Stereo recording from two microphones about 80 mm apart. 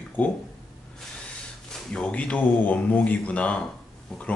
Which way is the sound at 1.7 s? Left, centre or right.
Centre.